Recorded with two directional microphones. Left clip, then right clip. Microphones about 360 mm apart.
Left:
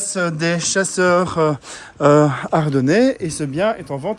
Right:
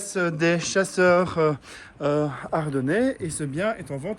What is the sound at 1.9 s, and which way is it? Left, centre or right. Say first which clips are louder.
Speech: left 11 dB; centre.